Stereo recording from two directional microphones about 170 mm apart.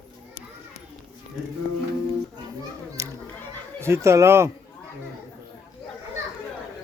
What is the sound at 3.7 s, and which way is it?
Speech, 15° right (ahead or behind).